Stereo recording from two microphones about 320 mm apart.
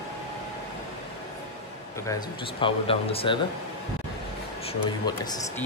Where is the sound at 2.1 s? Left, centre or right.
Centre.